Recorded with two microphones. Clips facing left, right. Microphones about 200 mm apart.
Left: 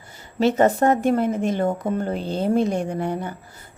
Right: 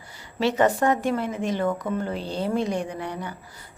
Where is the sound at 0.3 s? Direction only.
45° left (ahead or behind).